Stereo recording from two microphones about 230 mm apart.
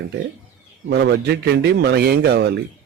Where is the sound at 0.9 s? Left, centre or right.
Right.